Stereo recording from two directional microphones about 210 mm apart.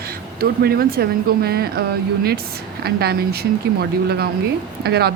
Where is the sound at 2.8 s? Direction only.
50° right (ahead or behind).